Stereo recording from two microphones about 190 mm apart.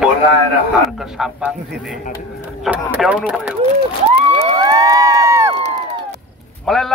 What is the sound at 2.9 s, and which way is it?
Speech, 5° right (ahead or behind).